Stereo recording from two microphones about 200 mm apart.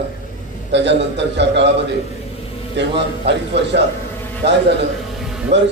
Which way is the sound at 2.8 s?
60° right (ahead or behind).